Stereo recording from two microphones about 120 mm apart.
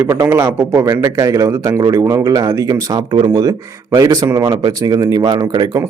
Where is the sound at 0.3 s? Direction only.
20° right (ahead or behind).